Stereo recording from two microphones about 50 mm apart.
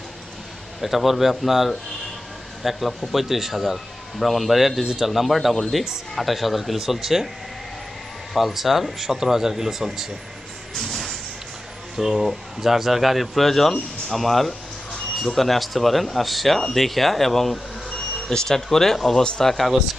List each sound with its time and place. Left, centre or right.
0.8 s speech: centre
8.3 s speech: centre
10.8 s a sound: centre
11.9 s speech: centre
14.9 s a sound: centre
15.4 s a man's voice: centre